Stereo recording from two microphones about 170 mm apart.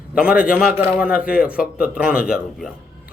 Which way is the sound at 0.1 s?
5° right (ahead or behind).